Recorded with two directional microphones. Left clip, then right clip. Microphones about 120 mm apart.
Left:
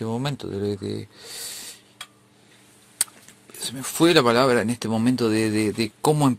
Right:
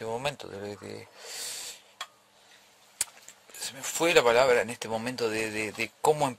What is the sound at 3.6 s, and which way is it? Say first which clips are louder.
Speech: left 7 dB; 25° right (ahead or behind).